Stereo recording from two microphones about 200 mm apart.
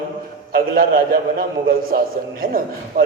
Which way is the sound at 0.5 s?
45° right (ahead or behind).